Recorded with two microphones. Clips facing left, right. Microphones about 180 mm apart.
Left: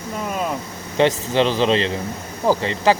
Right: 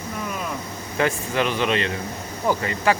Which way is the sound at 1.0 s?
25° left (ahead or behind).